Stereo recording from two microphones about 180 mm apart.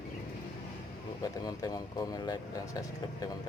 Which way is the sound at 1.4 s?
20° left (ahead or behind).